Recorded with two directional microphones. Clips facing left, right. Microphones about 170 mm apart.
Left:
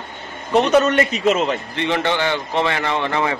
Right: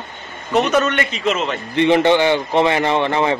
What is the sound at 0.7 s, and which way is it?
Speech, 30° left (ahead or behind).